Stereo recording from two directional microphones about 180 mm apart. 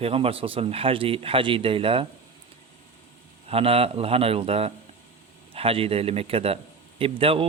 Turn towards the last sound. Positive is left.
turn(degrees=-30)  # may be behind; listen again after turning